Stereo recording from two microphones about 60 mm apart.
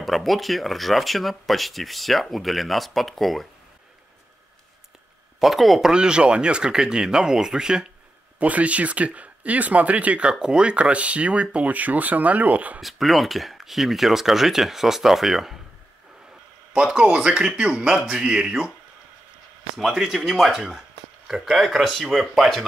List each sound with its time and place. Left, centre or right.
0.0 s speech: centre
5.4 s speech: centre
8.4 s speech: right
12.8 s speech: centre
16.7 s speech: centre
19.8 s speech: centre